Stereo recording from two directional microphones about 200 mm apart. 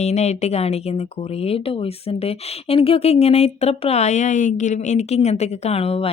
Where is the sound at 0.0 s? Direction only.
35° left (ahead or behind).